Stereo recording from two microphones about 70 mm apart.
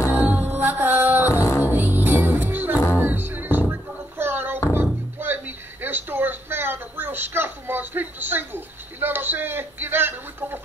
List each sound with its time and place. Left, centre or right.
0.1 s music: right
1.3 s music: left
1.6 s music: right
4.2 s a sound: right